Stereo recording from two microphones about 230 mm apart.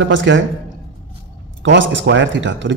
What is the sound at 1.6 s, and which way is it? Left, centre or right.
A man's voice, right.